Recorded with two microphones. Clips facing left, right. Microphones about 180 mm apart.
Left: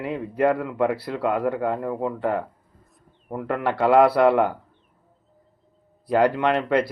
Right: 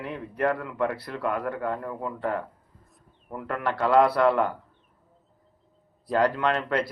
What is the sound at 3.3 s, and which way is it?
Speech, 20° left (ahead or behind).